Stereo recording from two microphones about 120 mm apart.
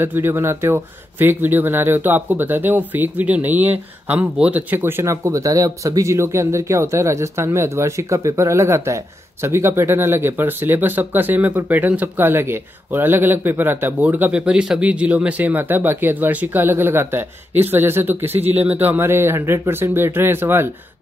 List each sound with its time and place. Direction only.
0.0 s speech: 20° right (ahead or behind)